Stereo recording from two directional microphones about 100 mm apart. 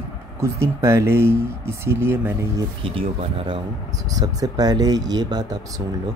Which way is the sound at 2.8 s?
65° right (ahead or behind).